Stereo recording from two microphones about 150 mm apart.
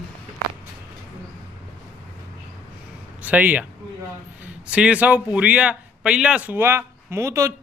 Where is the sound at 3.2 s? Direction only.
10° right (ahead or behind).